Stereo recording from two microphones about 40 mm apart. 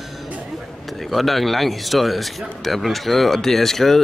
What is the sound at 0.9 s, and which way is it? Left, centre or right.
Speech, centre.